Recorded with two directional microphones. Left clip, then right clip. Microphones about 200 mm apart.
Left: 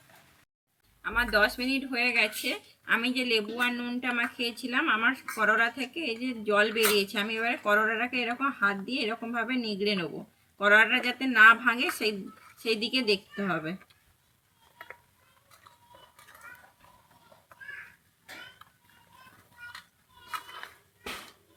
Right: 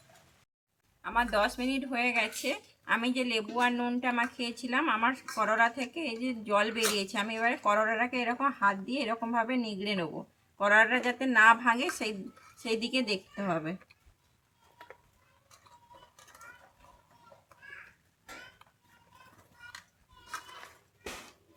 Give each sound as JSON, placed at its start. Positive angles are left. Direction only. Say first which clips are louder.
{"t": 1.0, "sound": "speech", "louder": "left 3 dB", "side_deg": -25}